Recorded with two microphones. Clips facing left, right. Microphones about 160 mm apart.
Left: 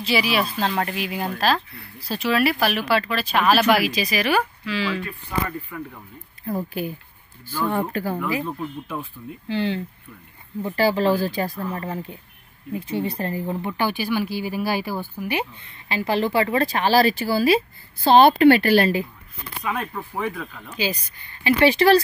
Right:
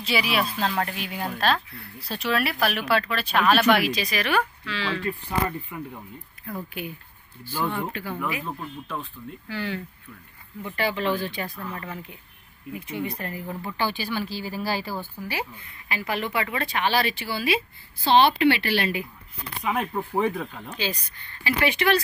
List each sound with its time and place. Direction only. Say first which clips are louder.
0.0 s speech: left 3 dB; centre (ahead or behind)
6.4 s speech: left 7 dB; 35° left (ahead or behind)
8.5 s speech: left 4 dB; 10° left (ahead or behind)
9.5 s speech: left 7 dB; 25° left (ahead or behind)
19.6 s speech: right 1 dB; 20° right (ahead or behind)
20.7 s speech: left 6 dB; 5° left (ahead or behind)
21.5 s speech: left 7 dB; 35° left (ahead or behind)